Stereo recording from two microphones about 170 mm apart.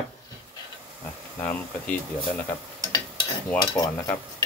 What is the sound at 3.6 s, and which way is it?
Cutlery, 20° left (ahead or behind).